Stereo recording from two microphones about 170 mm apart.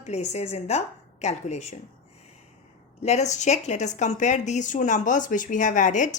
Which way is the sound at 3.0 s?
40° left (ahead or behind).